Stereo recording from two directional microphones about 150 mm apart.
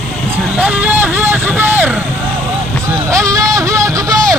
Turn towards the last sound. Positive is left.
turn(degrees=-20)  # may be behind; listen again after turning